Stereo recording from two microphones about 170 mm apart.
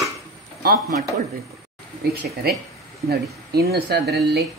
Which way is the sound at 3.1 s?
65° right (ahead or behind).